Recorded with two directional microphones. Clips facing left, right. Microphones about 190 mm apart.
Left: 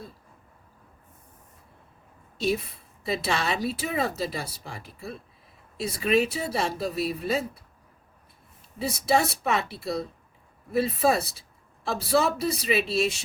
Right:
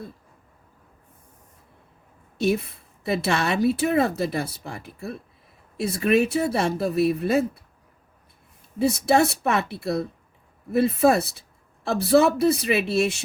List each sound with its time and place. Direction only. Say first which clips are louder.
2.4 s a woman's voice: right 4 dB; 60° right (ahead or behind)
8.8 s a woman's voice: right 5 dB; 55° right (ahead or behind)